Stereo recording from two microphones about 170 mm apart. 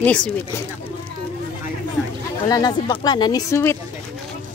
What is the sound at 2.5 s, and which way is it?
Speech, 25° left (ahead or behind).